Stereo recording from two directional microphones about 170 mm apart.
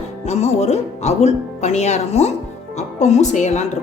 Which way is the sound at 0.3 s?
40° left (ahead or behind).